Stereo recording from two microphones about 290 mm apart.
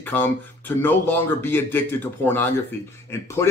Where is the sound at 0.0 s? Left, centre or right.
Centre.